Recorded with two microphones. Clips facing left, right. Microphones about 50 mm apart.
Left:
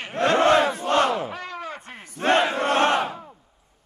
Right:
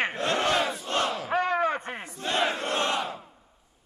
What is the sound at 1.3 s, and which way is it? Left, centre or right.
Slam, right.